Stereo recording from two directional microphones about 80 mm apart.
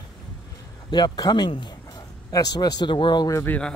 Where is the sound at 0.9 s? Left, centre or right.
Left.